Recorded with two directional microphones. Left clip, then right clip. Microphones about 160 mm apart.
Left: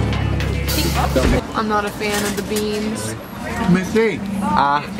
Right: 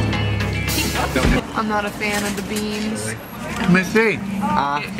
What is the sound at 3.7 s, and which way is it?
Speech, 25° right (ahead or behind).